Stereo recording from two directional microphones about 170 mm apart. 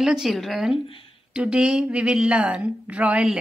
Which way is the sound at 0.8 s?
30° left (ahead or behind).